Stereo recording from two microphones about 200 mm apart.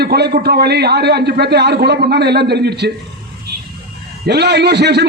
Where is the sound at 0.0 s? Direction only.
55° right (ahead or behind).